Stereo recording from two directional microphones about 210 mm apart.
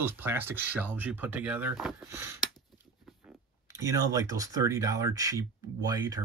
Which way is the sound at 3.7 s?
15° right (ahead or behind).